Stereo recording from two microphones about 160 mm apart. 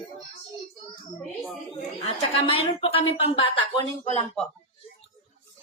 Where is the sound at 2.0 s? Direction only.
35° left (ahead or behind).